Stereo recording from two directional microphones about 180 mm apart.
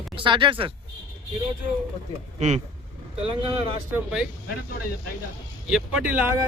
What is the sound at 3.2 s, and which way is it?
Speech, 30° right (ahead or behind).